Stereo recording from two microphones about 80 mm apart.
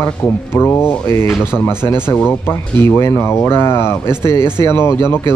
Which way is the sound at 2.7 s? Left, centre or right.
Left.